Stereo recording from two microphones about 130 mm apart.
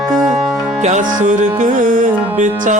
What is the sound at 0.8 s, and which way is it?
Music, 75° right (ahead or behind).